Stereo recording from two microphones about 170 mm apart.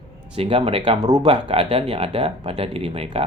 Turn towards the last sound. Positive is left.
turn(degrees=-35)  # may be behind; listen again after turning